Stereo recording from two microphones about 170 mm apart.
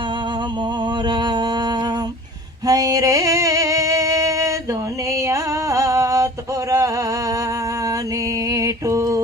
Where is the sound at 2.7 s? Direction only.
20° right (ahead or behind).